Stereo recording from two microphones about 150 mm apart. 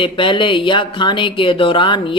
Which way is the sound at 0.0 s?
35° left (ahead or behind).